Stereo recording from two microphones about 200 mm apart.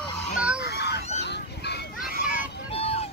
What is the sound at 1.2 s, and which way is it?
Goose, 55° left (ahead or behind).